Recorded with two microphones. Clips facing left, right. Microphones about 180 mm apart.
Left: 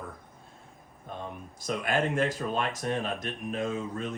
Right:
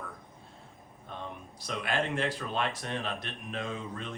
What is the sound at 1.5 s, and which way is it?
A man's voice, 45° left (ahead or behind).